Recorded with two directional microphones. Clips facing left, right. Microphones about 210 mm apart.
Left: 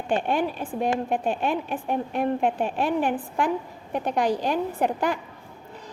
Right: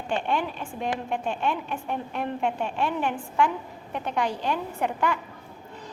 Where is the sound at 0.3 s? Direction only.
35° left (ahead or behind).